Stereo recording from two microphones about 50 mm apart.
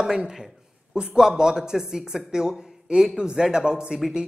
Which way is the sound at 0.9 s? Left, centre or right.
Centre.